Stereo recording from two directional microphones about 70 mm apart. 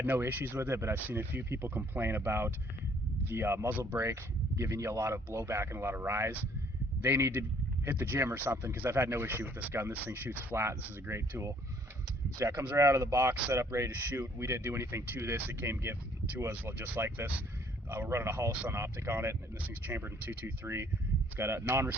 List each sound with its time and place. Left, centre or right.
0.0 s speech: right
12.4 s speech: right